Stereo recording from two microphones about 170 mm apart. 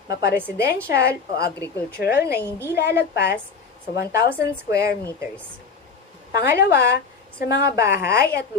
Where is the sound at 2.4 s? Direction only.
10° left (ahead or behind).